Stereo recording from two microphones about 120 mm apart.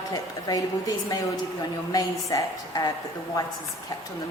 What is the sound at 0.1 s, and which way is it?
A woman's voice, 35° left (ahead or behind).